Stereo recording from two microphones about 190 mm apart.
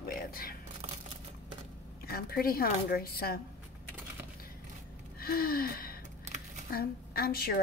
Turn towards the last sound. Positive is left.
turn(degrees=55)  # may be behind; listen again after turning